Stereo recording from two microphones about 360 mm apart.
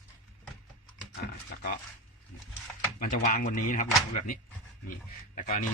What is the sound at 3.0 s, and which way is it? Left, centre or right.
A man's voice, left.